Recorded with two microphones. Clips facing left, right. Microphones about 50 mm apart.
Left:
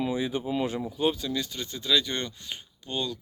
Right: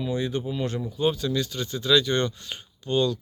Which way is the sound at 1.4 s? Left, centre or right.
Centre.